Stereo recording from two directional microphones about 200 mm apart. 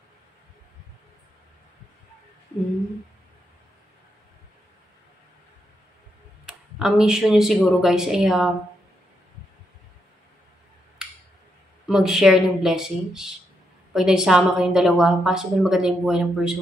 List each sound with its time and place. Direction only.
6.4 s speech: centre (ahead or behind)
11.9 s a woman's voice: centre (ahead or behind)